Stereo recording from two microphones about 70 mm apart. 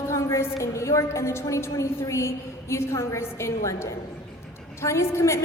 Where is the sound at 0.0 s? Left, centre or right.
Left.